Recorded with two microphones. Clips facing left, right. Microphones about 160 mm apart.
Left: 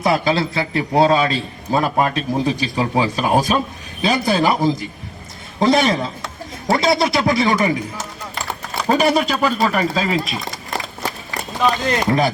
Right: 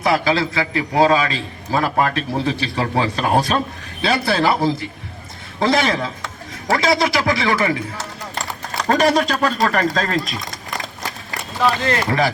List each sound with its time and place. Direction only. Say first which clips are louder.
0.0 s speech: even; 20° left (ahead or behind); by 10.2 s 5° left (ahead or behind)
11.6 s speech: left 1 dB; 20° left (ahead or behind)